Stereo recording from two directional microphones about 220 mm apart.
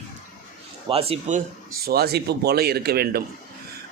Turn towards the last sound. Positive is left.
turn(degrees=-45)  # may be behind; listen again after turning